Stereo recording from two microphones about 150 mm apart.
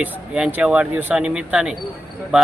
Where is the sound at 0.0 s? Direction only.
10° right (ahead or behind).